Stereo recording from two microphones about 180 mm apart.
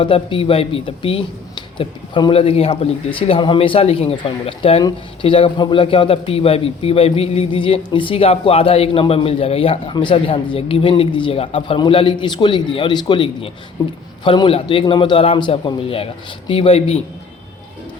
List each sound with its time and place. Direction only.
0.0 s a man's voice: 30° left (ahead or behind)